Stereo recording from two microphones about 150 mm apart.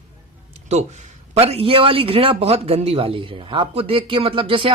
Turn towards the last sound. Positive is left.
turn(degrees=-35)  # may be behind; listen again after turning